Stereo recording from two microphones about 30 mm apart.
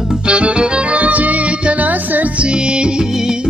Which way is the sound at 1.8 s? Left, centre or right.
Right.